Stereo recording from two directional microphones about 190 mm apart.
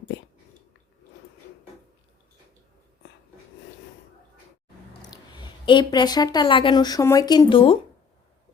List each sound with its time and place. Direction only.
5.0 s speech: 20° left (ahead or behind)